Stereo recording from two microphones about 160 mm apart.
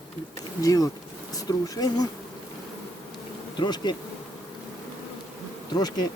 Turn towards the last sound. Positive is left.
turn(degrees=25)  # may be behind; listen again after turning